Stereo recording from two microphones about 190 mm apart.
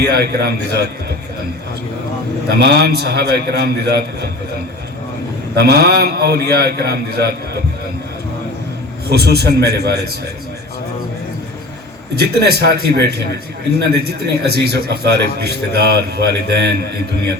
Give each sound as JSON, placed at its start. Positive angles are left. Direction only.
{"t": 0.0, "sound": "a man's voice", "side_deg": -55}
{"t": 2.5, "sound": "a man's voice", "side_deg": -55}
{"t": 5.5, "sound": "a man's voice", "side_deg": -55}
{"t": 9.0, "sound": "a man's voice", "side_deg": -55}
{"t": 12.3, "sound": "a man's voice", "side_deg": -60}